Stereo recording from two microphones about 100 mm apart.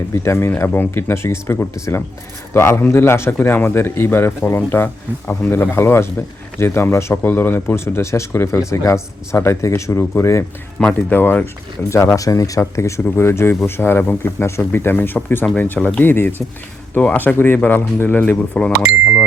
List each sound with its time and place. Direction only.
0.1 s speech: 25° left (ahead or behind)
10.8 s speech: 10° left (ahead or behind)
11.2 s speech: 20° left (ahead or behind)